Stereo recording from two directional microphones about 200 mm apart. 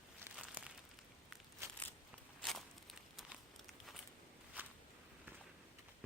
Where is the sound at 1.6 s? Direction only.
15° right (ahead or behind).